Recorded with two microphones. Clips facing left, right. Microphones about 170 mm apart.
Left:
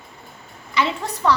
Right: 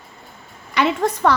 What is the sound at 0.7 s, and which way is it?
Speech, 55° right (ahead or behind).